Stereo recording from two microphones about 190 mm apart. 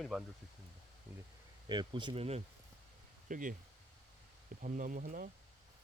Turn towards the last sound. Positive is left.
turn(degrees=-45)  # may be behind; listen again after turning